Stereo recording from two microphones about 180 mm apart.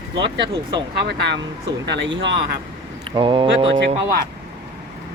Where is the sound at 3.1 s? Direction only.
25° right (ahead or behind).